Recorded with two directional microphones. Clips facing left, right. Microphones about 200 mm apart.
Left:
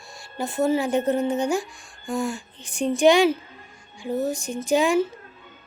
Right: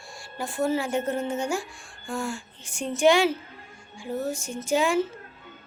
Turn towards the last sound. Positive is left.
turn(degrees=15)  # may be behind; listen again after turning